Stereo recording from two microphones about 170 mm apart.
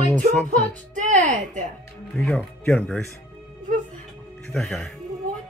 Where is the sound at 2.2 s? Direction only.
Centre (ahead or behind).